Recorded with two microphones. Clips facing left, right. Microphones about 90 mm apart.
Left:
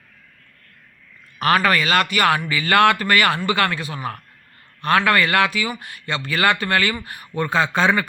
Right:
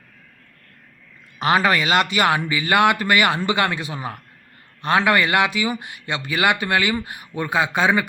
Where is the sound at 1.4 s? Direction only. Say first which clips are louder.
Even; 20° right (ahead or behind).